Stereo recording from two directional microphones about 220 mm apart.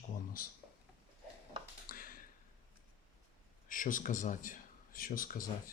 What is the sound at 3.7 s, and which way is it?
A man's voice, 35° left (ahead or behind).